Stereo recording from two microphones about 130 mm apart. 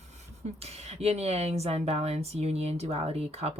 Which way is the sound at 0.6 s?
55° right (ahead or behind).